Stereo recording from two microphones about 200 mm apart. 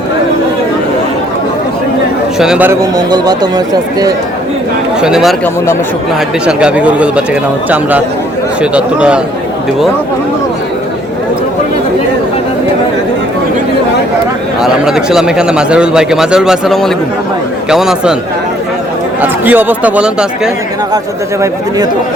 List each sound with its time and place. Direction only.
2.4 s a man's voice: 5° right (ahead or behind)
3.1 s speech: 20° right (ahead or behind)
4.9 s a man's voice: 5° right (ahead or behind)
6.4 s a man's voice: 5° right (ahead or behind)
14.6 s a man's voice: centre (ahead or behind)
19.2 s speech: 10° right (ahead or behind)